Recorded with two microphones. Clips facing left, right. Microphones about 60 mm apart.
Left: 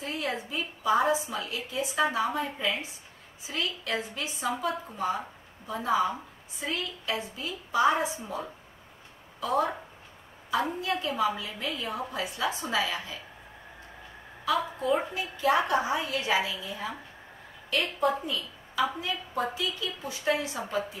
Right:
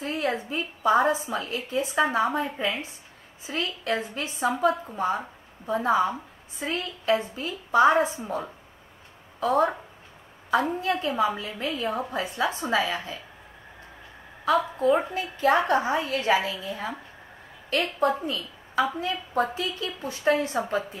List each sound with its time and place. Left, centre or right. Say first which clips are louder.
0.0 s a woman's voice: right 5 dB; right
10.8 s a woman's voice: right 3 dB; right
14.4 s a woman's voice: right 6 dB; right